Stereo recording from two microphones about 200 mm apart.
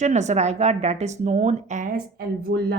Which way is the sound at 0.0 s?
35° right (ahead or behind).